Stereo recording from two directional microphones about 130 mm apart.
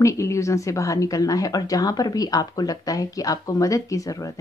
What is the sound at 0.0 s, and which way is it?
A woman's voice, 25° left (ahead or behind).